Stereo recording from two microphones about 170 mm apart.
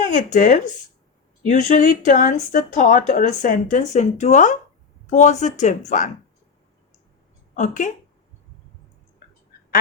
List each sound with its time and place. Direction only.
0.1 s speech: 45° left (ahead or behind)
7.5 s speech: 45° left (ahead or behind)